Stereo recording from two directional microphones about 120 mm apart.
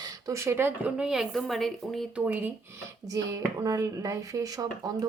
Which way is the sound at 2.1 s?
10° right (ahead or behind).